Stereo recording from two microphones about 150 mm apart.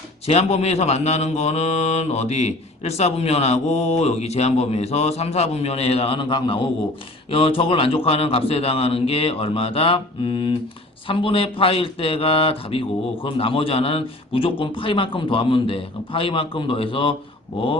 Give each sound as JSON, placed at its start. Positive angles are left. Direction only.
{"t": 0.3, "sound": "a man's voice", "side_deg": 45}